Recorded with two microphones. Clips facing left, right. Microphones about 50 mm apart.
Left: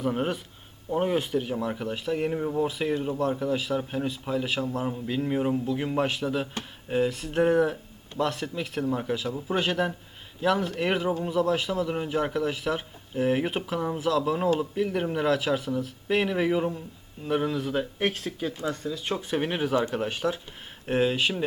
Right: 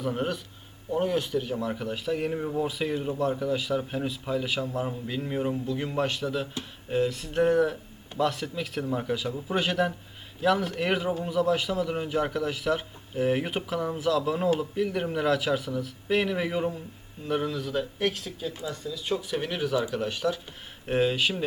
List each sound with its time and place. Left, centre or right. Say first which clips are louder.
0.0 s speech: left 2 dB; centre
0.9 s speech: left 1 dB; left
18.0 s speech: left 1 dB; left; by 20.4 s centre
20.8 s speech: even; centre